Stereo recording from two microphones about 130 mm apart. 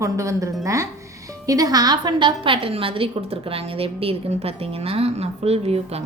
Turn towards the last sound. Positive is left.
turn(degrees=-50)  # may be behind; listen again after turning